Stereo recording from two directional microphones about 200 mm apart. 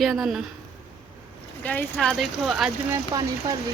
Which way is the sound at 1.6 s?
10° left (ahead or behind).